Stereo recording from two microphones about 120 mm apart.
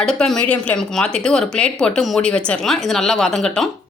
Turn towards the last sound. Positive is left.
turn(degrees=5)  # may be behind; listen again after turning